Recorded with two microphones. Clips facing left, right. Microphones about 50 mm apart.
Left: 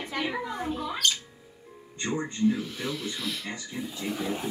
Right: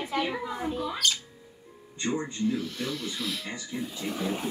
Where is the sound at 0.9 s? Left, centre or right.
Centre.